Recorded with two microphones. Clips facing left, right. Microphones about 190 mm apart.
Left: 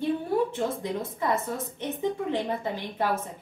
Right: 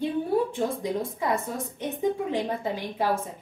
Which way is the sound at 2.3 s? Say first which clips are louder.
Right 1 dB; 15° right (ahead or behind).